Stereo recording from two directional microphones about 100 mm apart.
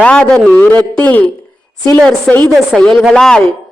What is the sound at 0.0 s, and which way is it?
A man's voice, 10° left (ahead or behind).